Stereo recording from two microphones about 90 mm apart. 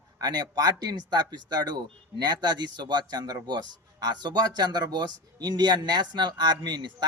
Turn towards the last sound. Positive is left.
turn(degrees=-55)  # may be behind; listen again after turning